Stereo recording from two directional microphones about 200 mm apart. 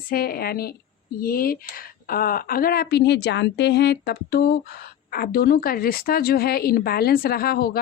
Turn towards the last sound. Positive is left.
turn(degrees=50)  # may be behind; listen again after turning